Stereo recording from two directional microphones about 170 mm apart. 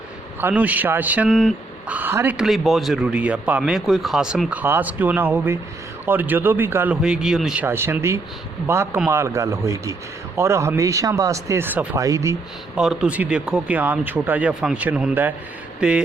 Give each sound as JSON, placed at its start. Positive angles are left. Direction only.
{"t": 0.4, "sound": "a man's voice", "side_deg": -10}
{"t": 1.3, "sound": "speech", "side_deg": 0}
{"t": 1.9, "sound": "a man's voice", "side_deg": -10}
{"t": 12.7, "sound": "a man's voice", "side_deg": -5}